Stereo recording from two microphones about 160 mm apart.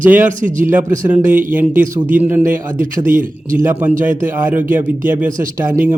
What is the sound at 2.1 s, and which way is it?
Speech, 10° right (ahead or behind).